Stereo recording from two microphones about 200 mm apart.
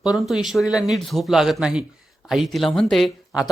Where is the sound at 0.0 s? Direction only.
5° right (ahead or behind).